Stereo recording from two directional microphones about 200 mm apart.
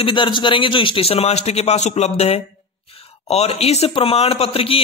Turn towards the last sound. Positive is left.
turn(degrees=30)  # may be behind; listen again after turning